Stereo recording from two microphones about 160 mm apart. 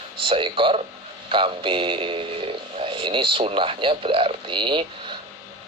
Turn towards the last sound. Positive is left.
turn(degrees=-30)  # may be behind; listen again after turning